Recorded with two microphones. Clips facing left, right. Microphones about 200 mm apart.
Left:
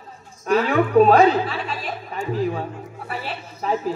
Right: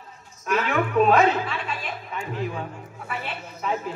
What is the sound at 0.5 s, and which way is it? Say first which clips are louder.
A woman's voice: left 6 dB; 35° left (ahead or behind).